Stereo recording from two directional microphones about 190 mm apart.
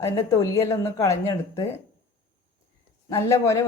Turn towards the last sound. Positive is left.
turn(degrees=15)  # may be behind; listen again after turning